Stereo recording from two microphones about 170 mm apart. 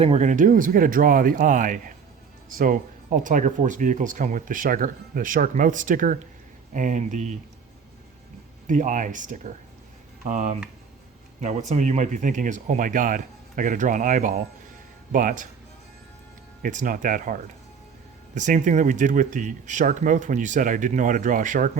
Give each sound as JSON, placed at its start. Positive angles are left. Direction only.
{"t": 0.0, "sound": "speech", "side_deg": -40}
{"t": 8.6, "sound": "speech", "side_deg": -45}
{"t": 16.6, "sound": "speech", "side_deg": -50}